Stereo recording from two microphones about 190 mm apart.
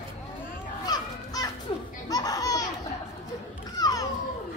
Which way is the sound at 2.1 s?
20° left (ahead or behind).